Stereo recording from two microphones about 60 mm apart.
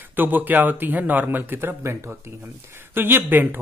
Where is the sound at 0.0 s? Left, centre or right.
Right.